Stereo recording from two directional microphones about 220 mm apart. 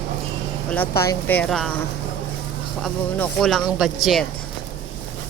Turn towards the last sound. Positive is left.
turn(degrees=0)  # may be behind; listen again after turning